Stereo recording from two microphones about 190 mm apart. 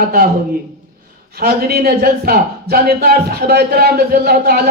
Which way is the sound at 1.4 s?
55° right (ahead or behind).